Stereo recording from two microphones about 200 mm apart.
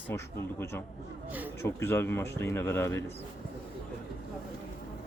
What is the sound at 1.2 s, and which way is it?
Speech, 10° right (ahead or behind).